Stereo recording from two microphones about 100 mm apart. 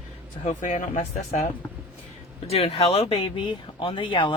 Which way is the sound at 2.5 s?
80° left.